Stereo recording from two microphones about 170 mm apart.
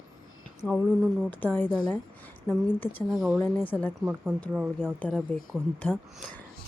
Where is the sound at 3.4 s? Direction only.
10° left (ahead or behind).